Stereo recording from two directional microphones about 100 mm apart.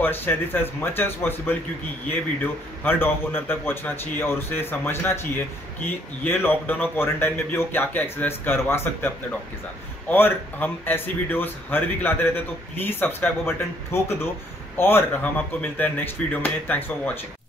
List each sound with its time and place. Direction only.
0.0 s speech: 20° left (ahead or behind)